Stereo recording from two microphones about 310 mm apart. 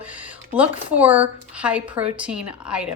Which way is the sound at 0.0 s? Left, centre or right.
Centre.